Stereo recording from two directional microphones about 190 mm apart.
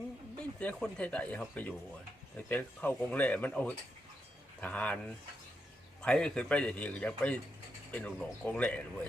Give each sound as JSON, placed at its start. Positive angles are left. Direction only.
{"t": 0.3, "sound": "a man's voice", "side_deg": 5}